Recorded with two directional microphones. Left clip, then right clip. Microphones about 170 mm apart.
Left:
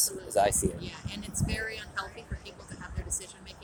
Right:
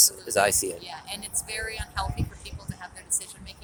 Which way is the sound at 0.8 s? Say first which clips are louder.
Right 4 dB; 25° right (ahead or behind).